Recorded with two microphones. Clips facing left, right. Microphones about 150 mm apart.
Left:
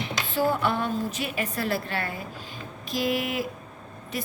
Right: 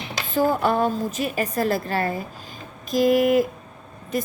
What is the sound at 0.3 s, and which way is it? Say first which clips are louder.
A woman's voice: right 5 dB; 45° right (ahead or behind).